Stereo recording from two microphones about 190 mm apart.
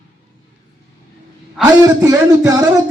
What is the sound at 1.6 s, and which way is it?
Speech, 20° right (ahead or behind).